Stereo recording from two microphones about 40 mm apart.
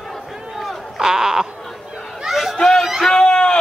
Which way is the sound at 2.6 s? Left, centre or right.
Centre.